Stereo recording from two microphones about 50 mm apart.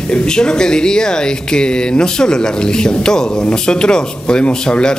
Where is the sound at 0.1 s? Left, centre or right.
Centre.